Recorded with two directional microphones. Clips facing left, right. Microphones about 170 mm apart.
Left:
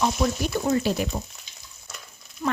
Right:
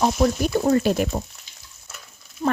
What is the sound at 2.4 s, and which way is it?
Speech, 35° right (ahead or behind).